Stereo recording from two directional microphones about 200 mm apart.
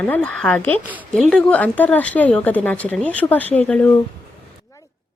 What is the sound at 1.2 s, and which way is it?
Speech, 5° left (ahead or behind).